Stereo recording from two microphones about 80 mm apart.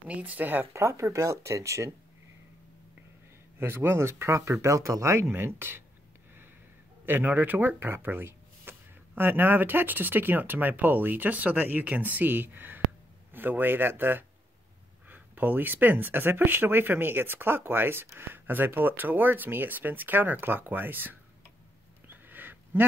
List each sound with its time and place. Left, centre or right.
0.1 s speech: centre
0.7 s speech: right
3.5 s speech: right
5.3 s speech: right
7.1 s speech: right
22.1 s a sound: right